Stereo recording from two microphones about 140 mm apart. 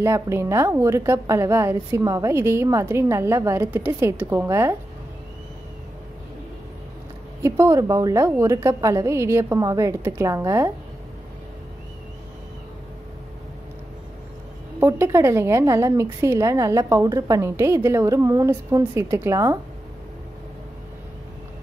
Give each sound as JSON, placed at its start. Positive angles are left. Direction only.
{"t": 0.0, "sound": "a woman's voice", "side_deg": -20}
{"t": 7.4, "sound": "a woman's voice", "side_deg": -20}
{"t": 14.8, "sound": "a woman's voice", "side_deg": -20}